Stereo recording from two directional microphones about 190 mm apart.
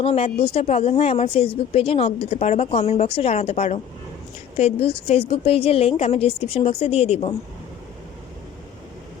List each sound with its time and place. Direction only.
0.0 s a woman's voice: 30° left (ahead or behind)